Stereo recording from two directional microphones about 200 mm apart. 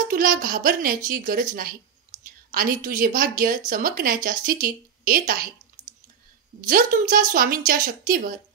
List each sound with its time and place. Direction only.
0.1 s a woman's voice: 45° right (ahead or behind)
5.8 s clicking: 20° right (ahead or behind)
6.7 s a woman's voice: 45° right (ahead or behind)